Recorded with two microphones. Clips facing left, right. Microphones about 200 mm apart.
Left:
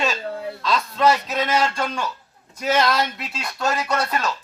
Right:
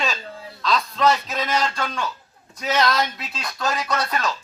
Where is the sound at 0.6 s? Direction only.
5° left (ahead or behind).